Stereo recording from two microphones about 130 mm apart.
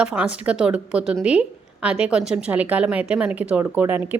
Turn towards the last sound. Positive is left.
turn(degrees=-15)  # may be behind; listen again after turning